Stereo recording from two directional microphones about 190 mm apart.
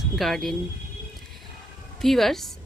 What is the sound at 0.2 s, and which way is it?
Speech, centre (ahead or behind).